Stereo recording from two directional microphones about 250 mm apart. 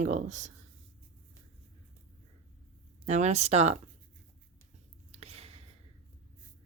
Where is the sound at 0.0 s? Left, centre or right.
Right.